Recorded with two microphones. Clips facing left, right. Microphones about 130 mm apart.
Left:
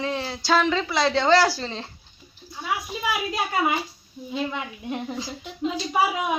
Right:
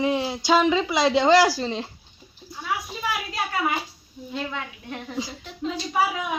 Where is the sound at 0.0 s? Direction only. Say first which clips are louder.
Right 4 dB; 15° right (ahead or behind).